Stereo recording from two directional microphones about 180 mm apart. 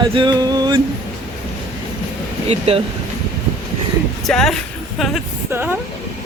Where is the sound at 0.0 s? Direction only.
25° right (ahead or behind).